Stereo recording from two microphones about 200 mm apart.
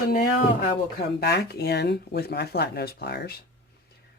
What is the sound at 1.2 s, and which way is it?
Speech, 55° left (ahead or behind).